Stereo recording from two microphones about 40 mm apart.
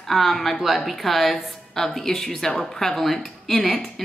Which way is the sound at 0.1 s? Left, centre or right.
Centre.